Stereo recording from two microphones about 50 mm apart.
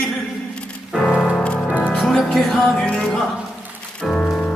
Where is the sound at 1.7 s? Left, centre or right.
Left.